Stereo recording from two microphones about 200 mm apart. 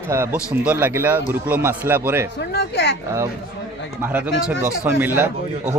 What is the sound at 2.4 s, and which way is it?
Speech, 55° left (ahead or behind).